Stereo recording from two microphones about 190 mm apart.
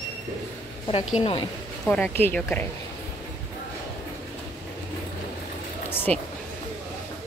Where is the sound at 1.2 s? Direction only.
30° left (ahead or behind).